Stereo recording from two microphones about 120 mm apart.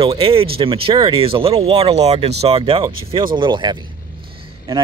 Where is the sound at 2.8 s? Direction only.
40° right (ahead or behind).